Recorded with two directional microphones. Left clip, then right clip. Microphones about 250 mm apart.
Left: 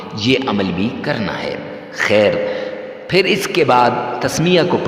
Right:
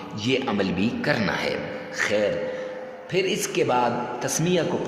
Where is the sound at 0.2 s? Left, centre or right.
Left.